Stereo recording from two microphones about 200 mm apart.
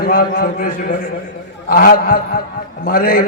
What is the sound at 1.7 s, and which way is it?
A man's voice, 45° left (ahead or behind).